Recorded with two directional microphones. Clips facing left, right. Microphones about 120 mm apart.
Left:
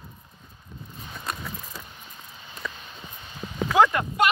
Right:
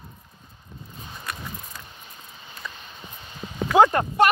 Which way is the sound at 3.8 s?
35° right (ahead or behind).